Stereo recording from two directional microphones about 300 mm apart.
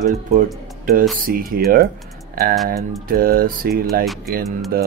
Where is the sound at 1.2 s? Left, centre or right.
Right.